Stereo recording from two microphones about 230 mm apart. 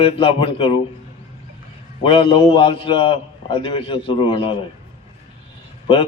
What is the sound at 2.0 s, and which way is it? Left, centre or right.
A man's voice, left.